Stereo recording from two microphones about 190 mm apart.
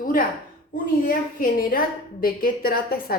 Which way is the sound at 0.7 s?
50° left (ahead or behind).